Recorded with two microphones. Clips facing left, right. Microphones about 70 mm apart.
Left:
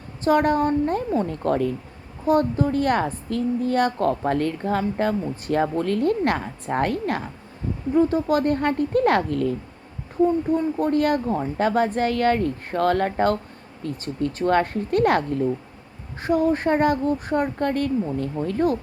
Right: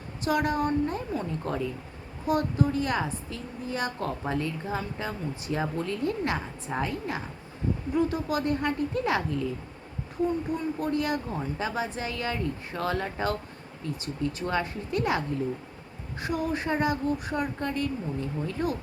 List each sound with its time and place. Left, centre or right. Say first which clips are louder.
0.3 s a woman's voice: left 7 dB; left
2.2 s a woman's voice: left 6 dB; left
7.9 s a woman's voice: left 9 dB; left
10.8 s a woman's voice: left 8 dB; left
16.2 s a woman's voice: left 9 dB; left